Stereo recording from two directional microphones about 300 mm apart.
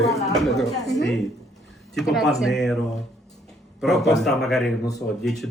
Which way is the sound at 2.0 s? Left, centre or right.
Centre.